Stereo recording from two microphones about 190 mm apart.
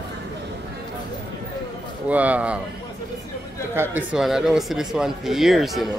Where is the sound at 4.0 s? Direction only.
5° right (ahead or behind).